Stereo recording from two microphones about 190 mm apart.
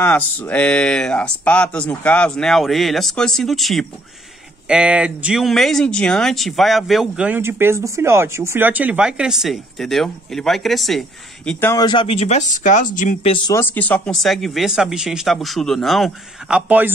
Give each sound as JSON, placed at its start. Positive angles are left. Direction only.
{"t": 0.0, "sound": "speech", "side_deg": 10}
{"t": 11.7, "sound": "speech", "side_deg": 25}
{"t": 13.5, "sound": "speech", "side_deg": 10}